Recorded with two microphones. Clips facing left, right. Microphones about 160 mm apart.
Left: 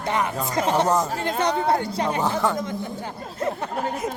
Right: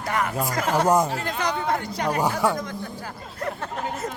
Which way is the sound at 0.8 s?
10° right (ahead or behind).